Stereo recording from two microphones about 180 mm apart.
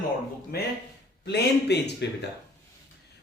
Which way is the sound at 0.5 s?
60° left (ahead or behind).